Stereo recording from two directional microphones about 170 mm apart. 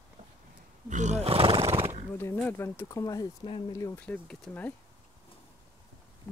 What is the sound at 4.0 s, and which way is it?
Speech, 5° left (ahead or behind).